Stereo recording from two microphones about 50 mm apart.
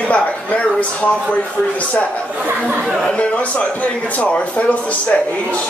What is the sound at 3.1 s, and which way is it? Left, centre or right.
A man's voice, left.